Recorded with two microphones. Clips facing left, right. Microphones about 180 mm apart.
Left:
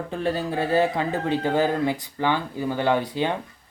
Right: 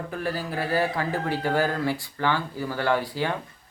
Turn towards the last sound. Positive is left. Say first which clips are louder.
# left 2 dB
turn(degrees=20)  # may be behind; listen again after turning